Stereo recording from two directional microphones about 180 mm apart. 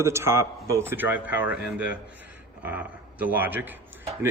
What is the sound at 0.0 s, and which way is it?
Speech, 15° right (ahead or behind).